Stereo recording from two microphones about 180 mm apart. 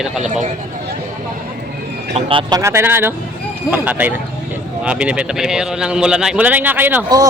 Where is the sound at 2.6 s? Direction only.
15° right (ahead or behind).